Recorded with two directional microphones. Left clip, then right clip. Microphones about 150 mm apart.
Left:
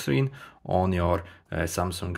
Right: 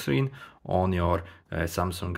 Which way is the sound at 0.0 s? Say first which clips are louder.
Left 1 dB; 10° left (ahead or behind).